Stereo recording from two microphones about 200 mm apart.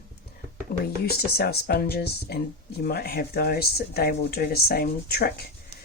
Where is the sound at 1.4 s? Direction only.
50° left (ahead or behind).